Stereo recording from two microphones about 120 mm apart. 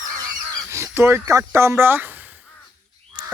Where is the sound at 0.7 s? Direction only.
20° right (ahead or behind).